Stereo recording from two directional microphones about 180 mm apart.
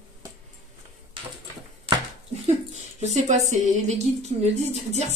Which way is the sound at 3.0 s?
40° right (ahead or behind).